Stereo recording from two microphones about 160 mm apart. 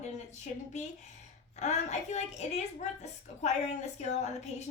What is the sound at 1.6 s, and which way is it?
A woman's voice, 45° left (ahead or behind).